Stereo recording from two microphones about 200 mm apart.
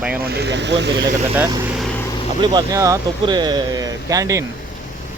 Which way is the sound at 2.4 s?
20° right (ahead or behind).